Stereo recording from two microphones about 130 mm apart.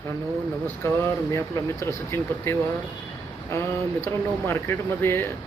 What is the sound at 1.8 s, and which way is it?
Speech, 20° left (ahead or behind).